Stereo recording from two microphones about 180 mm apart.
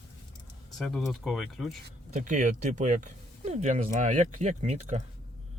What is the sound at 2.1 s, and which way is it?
Speech, 45° right (ahead or behind).